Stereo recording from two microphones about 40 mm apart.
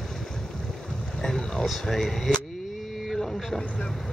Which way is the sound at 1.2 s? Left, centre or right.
Centre.